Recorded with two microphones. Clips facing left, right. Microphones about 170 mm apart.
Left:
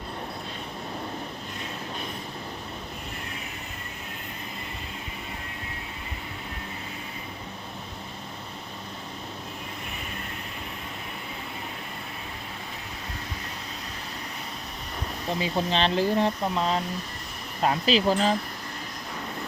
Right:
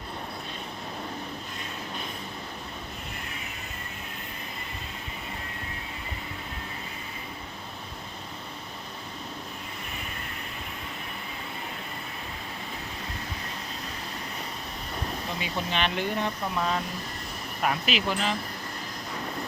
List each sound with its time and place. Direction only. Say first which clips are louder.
15.4 s speech: left 5 dB; 30° left (ahead or behind)